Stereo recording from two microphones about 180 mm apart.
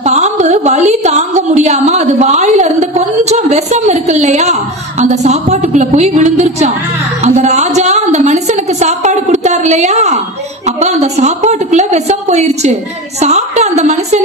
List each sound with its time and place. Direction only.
0.0 s a woman's voice: 40° right (ahead or behind)